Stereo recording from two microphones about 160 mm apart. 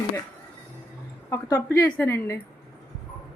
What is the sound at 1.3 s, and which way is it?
A woman's voice, 15° left (ahead or behind).